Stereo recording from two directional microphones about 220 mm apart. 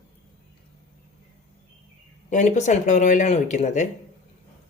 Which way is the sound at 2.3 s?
35° left (ahead or behind).